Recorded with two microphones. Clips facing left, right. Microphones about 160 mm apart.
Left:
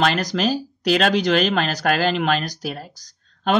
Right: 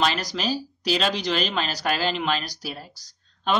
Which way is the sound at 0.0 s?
50° left (ahead or behind).